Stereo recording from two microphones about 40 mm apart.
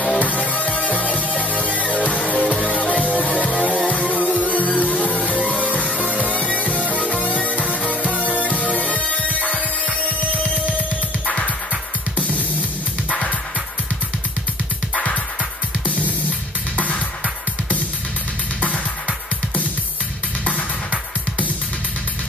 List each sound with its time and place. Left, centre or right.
0.2 s music: left
4.2 s music: right
4.7 s music: left
6.7 s music: right
7.0 s music: left
8.0 s music: right
8.3 s music: left
11.2 s music: left
16.7 s music: left